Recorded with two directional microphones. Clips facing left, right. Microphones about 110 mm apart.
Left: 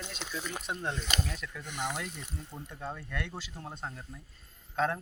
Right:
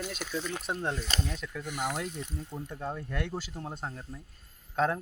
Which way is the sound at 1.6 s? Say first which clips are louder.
Right 3 dB; 5° right (ahead or behind).